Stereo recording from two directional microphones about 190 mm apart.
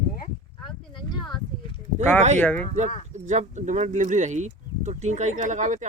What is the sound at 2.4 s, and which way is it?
Speech, 5° left (ahead or behind).